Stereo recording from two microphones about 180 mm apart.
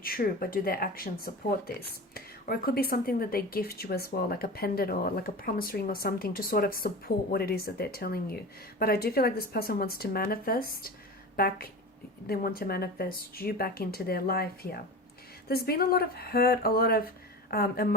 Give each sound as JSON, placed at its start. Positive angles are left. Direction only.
{"t": 0.0, "sound": "speech", "side_deg": 55}